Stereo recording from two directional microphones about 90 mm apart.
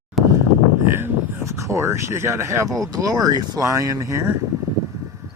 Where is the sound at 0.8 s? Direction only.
25° right (ahead or behind).